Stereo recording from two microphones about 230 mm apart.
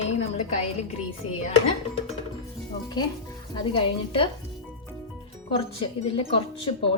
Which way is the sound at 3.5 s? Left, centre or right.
Left.